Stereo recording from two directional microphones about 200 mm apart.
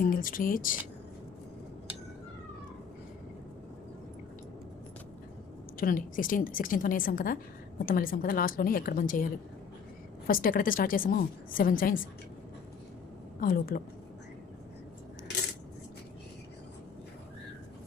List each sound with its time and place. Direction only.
0.0 s a woman's voice: 45° left (ahead or behind)
5.7 s a woman's voice: 45° left (ahead or behind)
10.2 s a woman's voice: 45° left (ahead or behind)
13.4 s a woman's voice: 45° left (ahead or behind)